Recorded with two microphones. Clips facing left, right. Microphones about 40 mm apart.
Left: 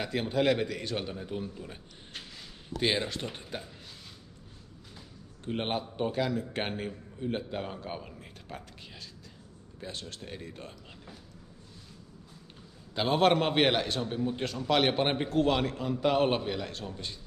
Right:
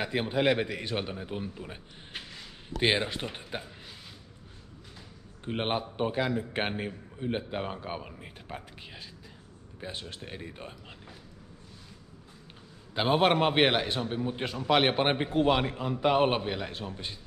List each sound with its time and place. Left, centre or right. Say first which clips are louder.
0.0 s a man's voice: right 1 dB; centre
5.4 s a man's voice: right 2 dB; centre
12.9 s a man's voice: even; centre